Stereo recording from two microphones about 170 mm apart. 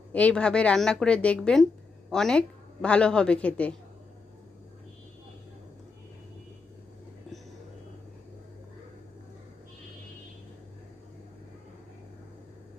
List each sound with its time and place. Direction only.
0.1 s a woman's voice: 10° left (ahead or behind)